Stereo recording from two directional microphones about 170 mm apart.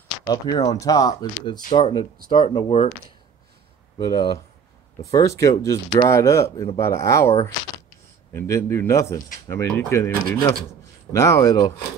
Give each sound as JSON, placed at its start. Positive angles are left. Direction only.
{"t": 0.3, "sound": "speech", "side_deg": 25}
{"t": 4.0, "sound": "speech", "side_deg": 25}